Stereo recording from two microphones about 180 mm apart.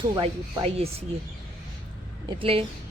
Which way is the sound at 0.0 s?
25° right (ahead or behind).